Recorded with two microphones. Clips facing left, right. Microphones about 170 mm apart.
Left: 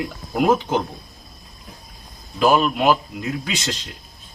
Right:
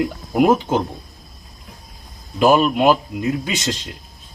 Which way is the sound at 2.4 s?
20° right (ahead or behind).